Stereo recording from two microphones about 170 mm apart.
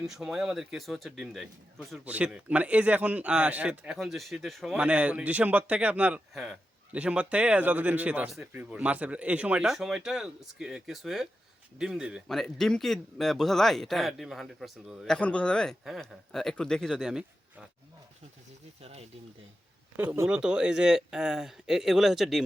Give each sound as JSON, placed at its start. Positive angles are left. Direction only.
{"t": 0.1, "sound": "a man's voice", "side_deg": -5}
{"t": 18.8, "sound": "speech", "side_deg": -35}
{"t": 20.0, "sound": "a man's voice", "side_deg": -10}